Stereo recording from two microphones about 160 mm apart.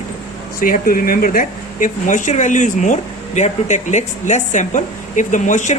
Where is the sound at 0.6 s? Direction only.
60° left (ahead or behind).